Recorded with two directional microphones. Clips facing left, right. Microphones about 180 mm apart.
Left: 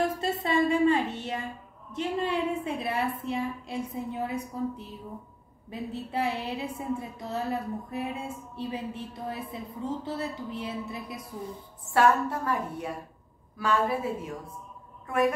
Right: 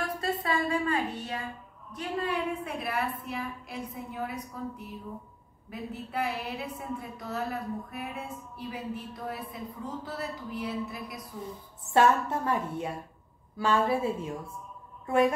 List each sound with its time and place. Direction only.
0.0 s a sound: 25° left (ahead or behind)
1.9 s a woman's voice: 25° left (ahead or behind)
11.9 s a woman's voice: 25° right (ahead or behind)